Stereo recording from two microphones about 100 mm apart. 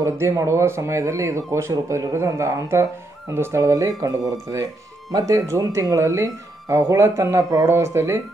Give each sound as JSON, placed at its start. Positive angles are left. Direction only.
{"t": 0.0, "sound": "speech", "side_deg": -30}